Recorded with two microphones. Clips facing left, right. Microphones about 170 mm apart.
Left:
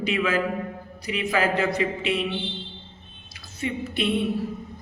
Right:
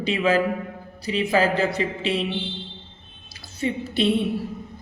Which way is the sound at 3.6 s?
30° right (ahead or behind).